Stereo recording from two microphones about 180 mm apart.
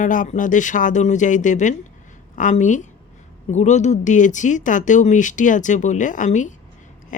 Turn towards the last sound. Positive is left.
turn(degrees=45)  # may be behind; listen again after turning